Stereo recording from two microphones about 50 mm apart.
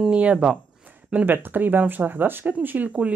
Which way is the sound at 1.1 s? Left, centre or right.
Right.